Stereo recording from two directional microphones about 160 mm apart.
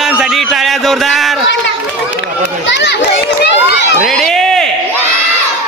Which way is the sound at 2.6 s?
90° left.